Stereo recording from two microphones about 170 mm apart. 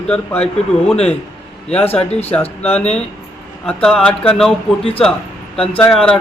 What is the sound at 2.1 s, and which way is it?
Speech, 40° left (ahead or behind).